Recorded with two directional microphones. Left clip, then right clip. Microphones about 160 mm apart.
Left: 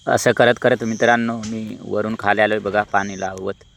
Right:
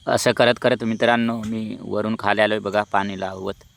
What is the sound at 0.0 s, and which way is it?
Speech, 10° left (ahead or behind).